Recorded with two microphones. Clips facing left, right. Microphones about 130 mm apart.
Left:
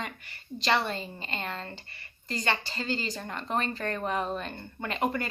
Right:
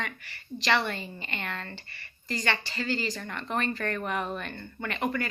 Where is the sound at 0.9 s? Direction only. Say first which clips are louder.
Left 1 dB; 30° left (ahead or behind).